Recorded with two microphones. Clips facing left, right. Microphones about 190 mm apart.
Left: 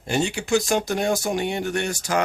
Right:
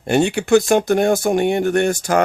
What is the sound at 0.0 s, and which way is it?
Speech, 60° right (ahead or behind).